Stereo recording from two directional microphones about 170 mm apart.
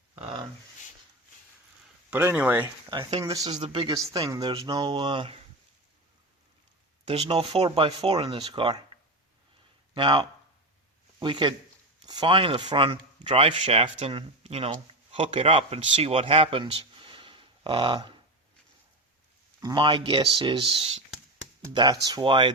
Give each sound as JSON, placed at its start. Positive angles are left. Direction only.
{"t": 2.0, "sound": "speech", "side_deg": -10}
{"t": 3.1, "sound": "speech", "side_deg": -35}
{"t": 3.3, "sound": "speech", "side_deg": -20}
{"t": 3.9, "sound": "speech", "side_deg": -20}
{"t": 7.0, "sound": "speech", "side_deg": -35}
{"t": 9.9, "sound": "speech", "side_deg": -25}
{"t": 19.6, "sound": "speech", "side_deg": -30}